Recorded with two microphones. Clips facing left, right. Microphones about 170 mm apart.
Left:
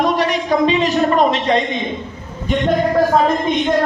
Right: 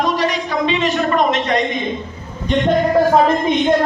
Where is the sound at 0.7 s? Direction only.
35° left (ahead or behind).